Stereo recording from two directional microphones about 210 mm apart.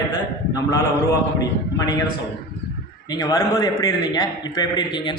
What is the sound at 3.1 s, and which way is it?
A man's voice, 20° left (ahead or behind).